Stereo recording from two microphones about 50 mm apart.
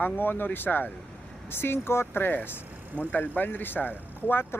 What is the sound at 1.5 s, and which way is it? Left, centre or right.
Speech, left.